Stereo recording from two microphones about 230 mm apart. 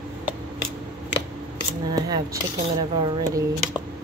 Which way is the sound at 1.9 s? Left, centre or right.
Centre.